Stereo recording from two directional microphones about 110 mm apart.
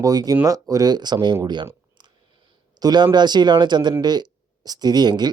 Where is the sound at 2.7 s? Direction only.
40° right (ahead or behind).